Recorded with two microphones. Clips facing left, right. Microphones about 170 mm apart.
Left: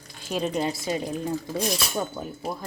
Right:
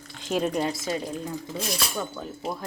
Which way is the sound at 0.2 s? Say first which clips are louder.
Right 2 dB; 15° right (ahead or behind).